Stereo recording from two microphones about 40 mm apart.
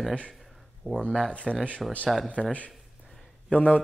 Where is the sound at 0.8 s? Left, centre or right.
Left.